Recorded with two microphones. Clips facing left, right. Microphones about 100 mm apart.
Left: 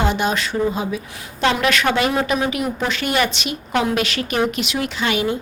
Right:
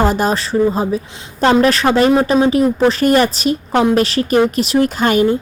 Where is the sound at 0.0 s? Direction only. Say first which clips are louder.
Right 5 dB; 40° right (ahead or behind).